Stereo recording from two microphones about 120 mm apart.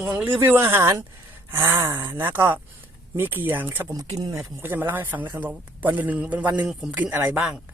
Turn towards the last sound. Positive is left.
turn(degrees=-5)  # may be behind; listen again after turning